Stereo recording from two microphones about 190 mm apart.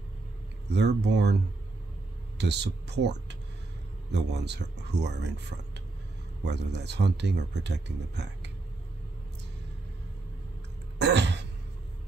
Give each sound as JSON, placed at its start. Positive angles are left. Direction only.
{"t": 0.7, "sound": "speech", "side_deg": -65}
{"t": 2.3, "sound": "speech", "side_deg": -65}
{"t": 6.4, "sound": "speech", "side_deg": -65}
{"t": 11.0, "sound": "cough", "side_deg": -65}